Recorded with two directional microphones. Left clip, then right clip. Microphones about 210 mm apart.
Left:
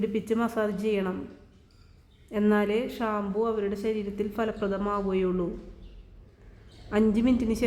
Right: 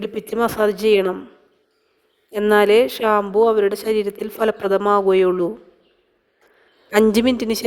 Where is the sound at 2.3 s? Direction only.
45° right (ahead or behind).